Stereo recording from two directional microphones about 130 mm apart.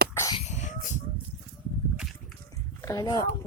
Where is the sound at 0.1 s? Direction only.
20° left (ahead or behind).